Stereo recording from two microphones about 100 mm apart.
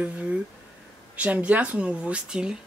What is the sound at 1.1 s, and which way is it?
Speech, 15° right (ahead or behind).